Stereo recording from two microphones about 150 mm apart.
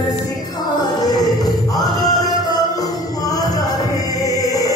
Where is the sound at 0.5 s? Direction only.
25° left (ahead or behind).